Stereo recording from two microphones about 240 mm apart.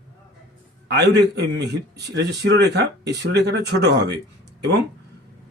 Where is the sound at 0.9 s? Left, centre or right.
Right.